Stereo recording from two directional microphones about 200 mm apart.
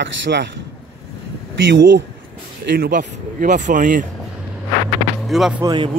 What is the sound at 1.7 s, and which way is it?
Speech, 65° right (ahead or behind).